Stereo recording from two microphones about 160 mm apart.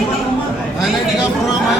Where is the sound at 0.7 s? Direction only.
5° right (ahead or behind).